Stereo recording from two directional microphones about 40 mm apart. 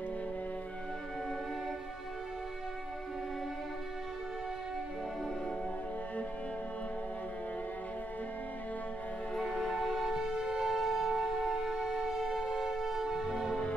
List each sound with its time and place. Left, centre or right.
9.3 s music: centre
9.6 s music: centre
10.1 s music: centre